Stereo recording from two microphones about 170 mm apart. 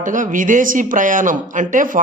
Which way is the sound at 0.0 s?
50° right (ahead or behind).